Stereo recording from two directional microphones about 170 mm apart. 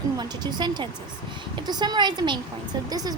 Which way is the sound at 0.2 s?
25° right (ahead or behind).